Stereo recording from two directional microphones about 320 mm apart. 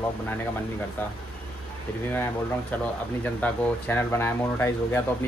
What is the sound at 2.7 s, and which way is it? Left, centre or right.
Speech, centre.